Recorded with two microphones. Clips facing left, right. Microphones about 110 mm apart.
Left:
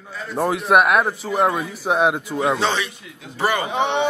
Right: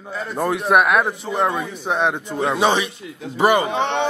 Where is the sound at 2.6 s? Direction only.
15° right (ahead or behind).